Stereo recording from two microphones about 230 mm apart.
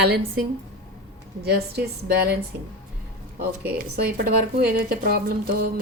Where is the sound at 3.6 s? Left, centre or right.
Right.